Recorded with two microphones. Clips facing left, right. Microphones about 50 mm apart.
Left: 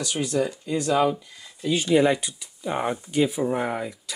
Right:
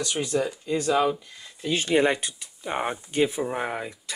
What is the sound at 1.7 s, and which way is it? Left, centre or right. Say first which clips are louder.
Speech: left 2 dB; right.